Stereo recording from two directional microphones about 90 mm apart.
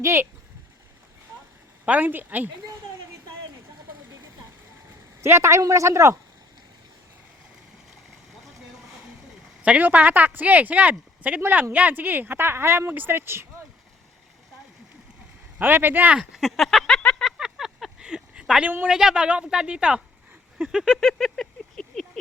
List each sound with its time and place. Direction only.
0.0 s speech: 30° right (ahead or behind)
1.8 s speech: 15° right (ahead or behind)
5.2 s speech: 30° right (ahead or behind)
9.6 s speech: 15° right (ahead or behind)
15.5 s speech: 20° right (ahead or behind)
16.3 s a sound: centre (ahead or behind)
17.3 s a sound: 5° right (ahead or behind)
18.9 s speech: 10° right (ahead or behind)
20.6 s a sound: 5° right (ahead or behind)